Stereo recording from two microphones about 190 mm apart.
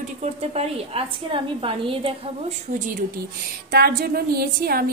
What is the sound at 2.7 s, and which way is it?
A woman's voice, 45° right (ahead or behind).